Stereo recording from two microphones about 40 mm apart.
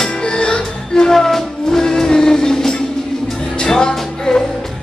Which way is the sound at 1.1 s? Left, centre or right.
Centre.